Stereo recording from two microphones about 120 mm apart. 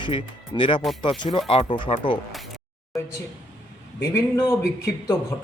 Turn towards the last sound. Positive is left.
turn(degrees=25)  # may be behind; listen again after turning